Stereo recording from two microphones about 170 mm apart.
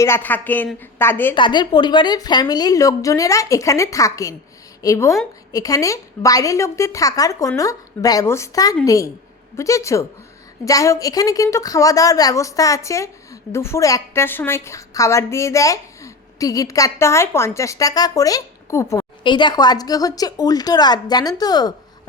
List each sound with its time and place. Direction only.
0.0 s speech: 15° left (ahead or behind)
1.4 s a woman's voice: 25° left (ahead or behind)
19.2 s a woman's voice: 25° left (ahead or behind)